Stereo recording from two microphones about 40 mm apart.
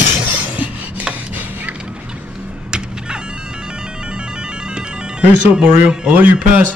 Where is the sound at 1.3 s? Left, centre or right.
Right.